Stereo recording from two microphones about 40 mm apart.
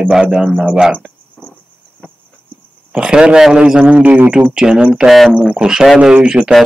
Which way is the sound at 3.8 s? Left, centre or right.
Right.